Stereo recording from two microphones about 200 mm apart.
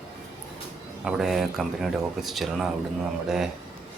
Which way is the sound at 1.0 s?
Centre (ahead or behind).